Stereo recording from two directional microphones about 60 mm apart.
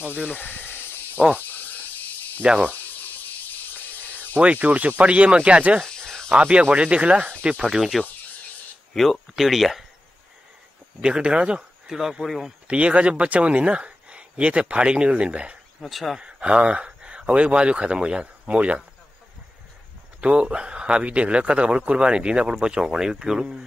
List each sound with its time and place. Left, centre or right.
0.0 s speech: right
0.3 s snake: left
2.4 s speech: centre
2.7 s cricket: left
4.4 s speech: right
5.9 s snake: centre
6.3 s speech: right
7.5 s speech: centre
11.0 s speech: centre
11.9 s speech: centre
12.6 s speech: right
15.8 s speech: centre
16.2 s speech: centre
20.2 s speech: centre